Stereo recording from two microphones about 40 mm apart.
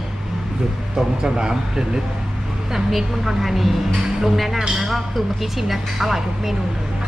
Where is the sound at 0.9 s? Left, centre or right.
Centre.